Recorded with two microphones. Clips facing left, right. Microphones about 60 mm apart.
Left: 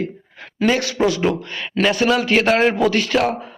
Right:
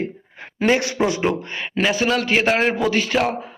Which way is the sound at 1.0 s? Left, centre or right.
Right.